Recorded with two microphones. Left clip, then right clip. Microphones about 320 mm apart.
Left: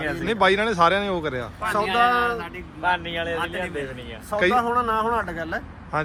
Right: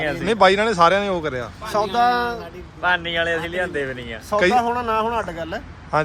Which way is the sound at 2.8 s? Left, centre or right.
Right.